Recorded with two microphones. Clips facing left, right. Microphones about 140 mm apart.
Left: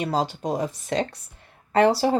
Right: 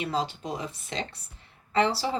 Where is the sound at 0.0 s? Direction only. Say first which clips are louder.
Left 5 dB; 45° left (ahead or behind).